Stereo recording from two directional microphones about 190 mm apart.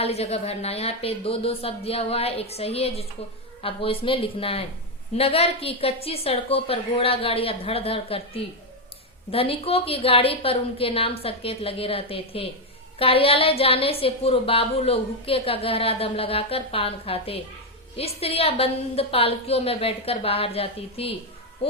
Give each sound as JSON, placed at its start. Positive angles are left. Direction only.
{"t": 0.0, "sound": "a woman's voice", "side_deg": 35}